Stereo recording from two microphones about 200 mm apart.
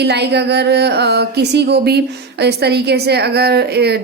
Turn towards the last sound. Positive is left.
turn(degrees=-55)  # may be behind; listen again after turning